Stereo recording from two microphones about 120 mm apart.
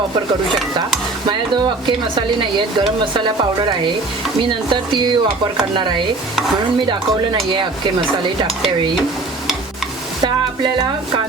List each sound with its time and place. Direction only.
1.3 s speech: 40° right (ahead or behind)